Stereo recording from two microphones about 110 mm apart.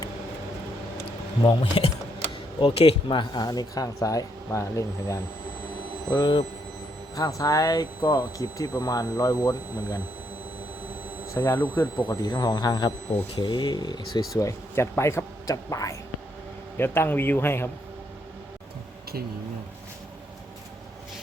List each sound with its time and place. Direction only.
1.8 s speech: 45° left (ahead or behind)
2.6 s speech: 55° left (ahead or behind); by 5.2 s 25° left (ahead or behind)
6.1 s speech: 40° left (ahead or behind)
11.3 s a man's voice: 25° left (ahead or behind)
11.9 s speech: 40° left (ahead or behind)
16.7 s a man's voice: 20° left (ahead or behind)